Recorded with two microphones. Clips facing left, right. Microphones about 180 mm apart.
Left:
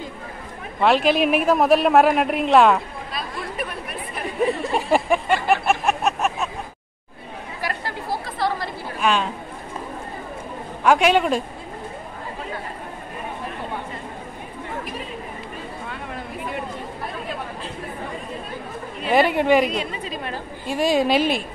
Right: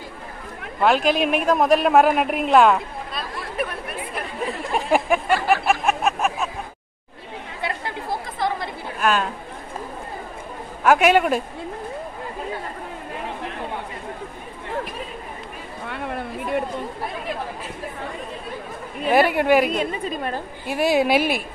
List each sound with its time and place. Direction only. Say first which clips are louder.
0.7 s a man's voice: left 1 dB; centre (ahead or behind)
4.1 s a sound: left 8 dB; centre (ahead or behind)
7.6 s chatter: even; 20° right (ahead or behind)
9.0 s speech: even; centre (ahead or behind)
10.8 s a man's voice: right 1 dB; 5° right (ahead or behind)
19.0 s speech: even; 5° right (ahead or behind)
19.8 s a woman's voice: right 4 dB; 50° right (ahead or behind)
20.6 s speech: even; 10° right (ahead or behind)